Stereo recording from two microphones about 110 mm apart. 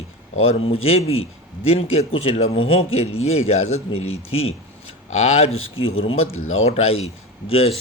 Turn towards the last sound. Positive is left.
turn(degrees=60)  # may be behind; listen again after turning